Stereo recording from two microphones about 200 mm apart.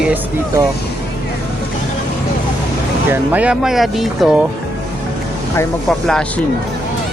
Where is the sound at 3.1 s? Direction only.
10° right (ahead or behind).